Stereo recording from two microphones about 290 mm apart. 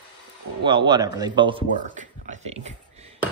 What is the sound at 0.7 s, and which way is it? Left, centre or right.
A man's voice, centre.